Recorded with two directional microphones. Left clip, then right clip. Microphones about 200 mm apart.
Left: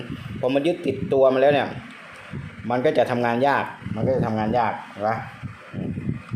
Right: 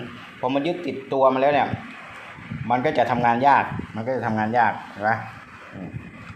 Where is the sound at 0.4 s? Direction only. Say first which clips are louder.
Left 2 dB; 30° left (ahead or behind).